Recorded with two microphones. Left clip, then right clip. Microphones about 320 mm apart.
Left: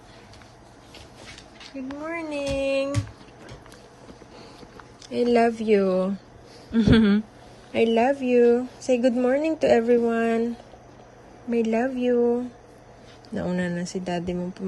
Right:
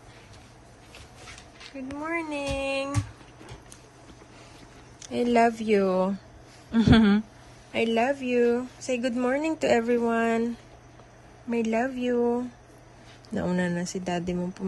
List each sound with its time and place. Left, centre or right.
1.7 s a woman's voice: centre
5.0 s a woman's voice: centre
11.5 s a woman's voice: centre
13.3 s speech: centre